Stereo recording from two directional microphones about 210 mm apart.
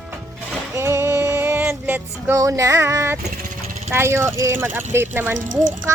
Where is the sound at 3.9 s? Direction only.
10° right (ahead or behind).